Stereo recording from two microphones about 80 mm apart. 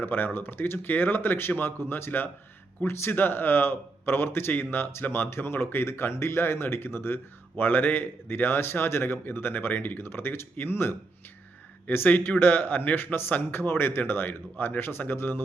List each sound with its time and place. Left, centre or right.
0.0 s a man's voice: left